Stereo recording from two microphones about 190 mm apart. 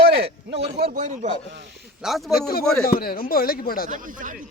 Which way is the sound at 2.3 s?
55° left (ahead or behind).